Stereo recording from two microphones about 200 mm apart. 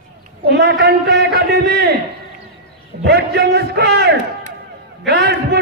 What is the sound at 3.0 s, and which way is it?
A man's voice, 55° right (ahead or behind).